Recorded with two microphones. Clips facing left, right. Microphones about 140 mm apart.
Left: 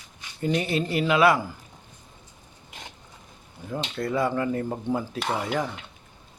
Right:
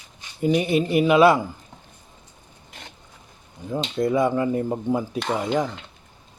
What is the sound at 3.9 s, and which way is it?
Speech, 20° right (ahead or behind).